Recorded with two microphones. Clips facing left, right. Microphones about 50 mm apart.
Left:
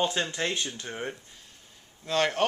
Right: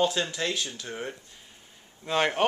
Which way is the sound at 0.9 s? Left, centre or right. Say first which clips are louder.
Even; centre.